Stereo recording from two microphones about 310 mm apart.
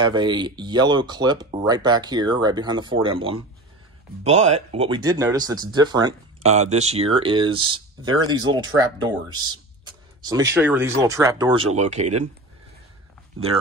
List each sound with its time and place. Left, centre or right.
0.0 s speech: centre